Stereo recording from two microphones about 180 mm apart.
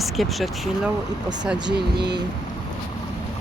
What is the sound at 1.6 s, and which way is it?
Speech, 70° right (ahead or behind).